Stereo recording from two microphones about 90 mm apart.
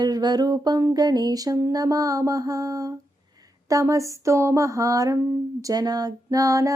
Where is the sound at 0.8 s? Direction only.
45° right (ahead or behind).